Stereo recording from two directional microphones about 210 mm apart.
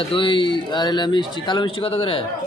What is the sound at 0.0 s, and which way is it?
Speech, 25° left (ahead or behind).